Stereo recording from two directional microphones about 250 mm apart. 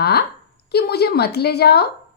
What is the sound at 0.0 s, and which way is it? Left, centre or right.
A woman's voice, left.